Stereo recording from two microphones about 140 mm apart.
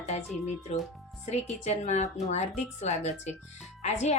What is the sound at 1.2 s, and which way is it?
Speech, 50° left (ahead or behind).